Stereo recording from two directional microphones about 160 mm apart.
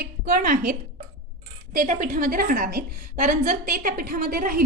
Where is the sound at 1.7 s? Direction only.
55° right (ahead or behind).